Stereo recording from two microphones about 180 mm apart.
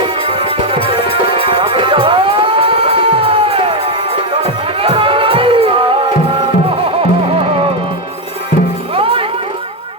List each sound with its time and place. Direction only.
1.5 s music: 25° right (ahead or behind)
9.0 s music: 30° right (ahead or behind)